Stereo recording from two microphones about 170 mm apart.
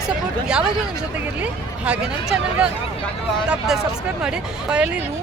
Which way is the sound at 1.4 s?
5° right (ahead or behind).